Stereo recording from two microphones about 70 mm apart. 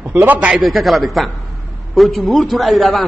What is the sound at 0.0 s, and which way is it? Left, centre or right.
Speech, right.